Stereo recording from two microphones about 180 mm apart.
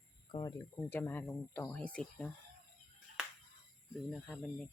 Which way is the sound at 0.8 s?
10° left (ahead or behind).